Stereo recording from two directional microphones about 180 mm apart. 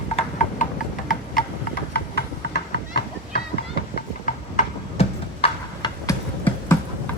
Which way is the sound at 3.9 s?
45° left (ahead or behind).